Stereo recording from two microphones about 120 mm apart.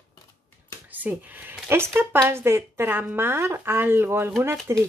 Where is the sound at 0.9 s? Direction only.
15° right (ahead or behind).